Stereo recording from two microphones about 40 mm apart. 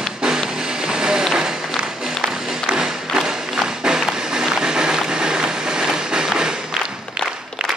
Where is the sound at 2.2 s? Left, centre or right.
Right.